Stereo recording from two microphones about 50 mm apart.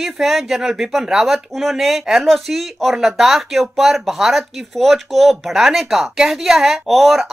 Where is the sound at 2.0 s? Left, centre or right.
Centre.